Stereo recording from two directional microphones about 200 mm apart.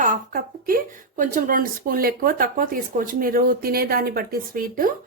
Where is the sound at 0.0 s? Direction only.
45° right (ahead or behind).